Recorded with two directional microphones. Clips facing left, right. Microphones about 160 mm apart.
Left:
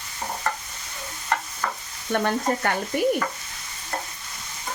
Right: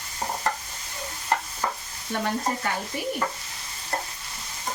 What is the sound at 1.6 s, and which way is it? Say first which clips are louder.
Stir: right 1 dB; 25° right (ahead or behind).